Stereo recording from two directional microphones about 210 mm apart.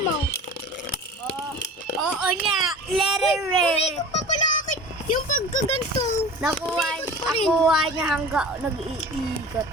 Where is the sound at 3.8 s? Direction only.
30° left (ahead or behind).